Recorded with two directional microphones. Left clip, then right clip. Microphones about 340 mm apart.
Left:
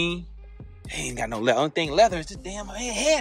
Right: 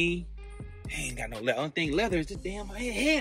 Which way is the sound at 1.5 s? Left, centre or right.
Centre.